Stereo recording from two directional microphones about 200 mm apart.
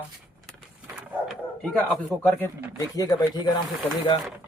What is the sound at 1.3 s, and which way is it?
Speech, 5° left (ahead or behind).